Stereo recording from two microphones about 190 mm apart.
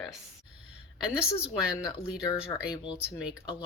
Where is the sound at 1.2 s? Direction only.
5° right (ahead or behind).